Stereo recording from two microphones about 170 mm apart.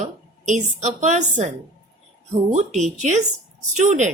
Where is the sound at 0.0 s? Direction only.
45° right (ahead or behind).